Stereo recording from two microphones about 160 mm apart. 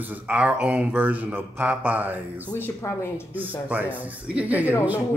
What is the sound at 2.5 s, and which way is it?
Speech, 15° left (ahead or behind).